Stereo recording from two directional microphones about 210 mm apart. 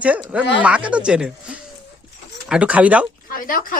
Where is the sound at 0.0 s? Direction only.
5° right (ahead or behind).